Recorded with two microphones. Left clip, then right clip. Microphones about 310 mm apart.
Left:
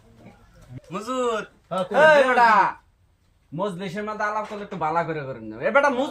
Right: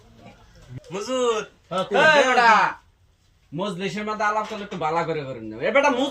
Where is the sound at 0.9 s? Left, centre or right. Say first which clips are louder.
Right 2 dB; centre.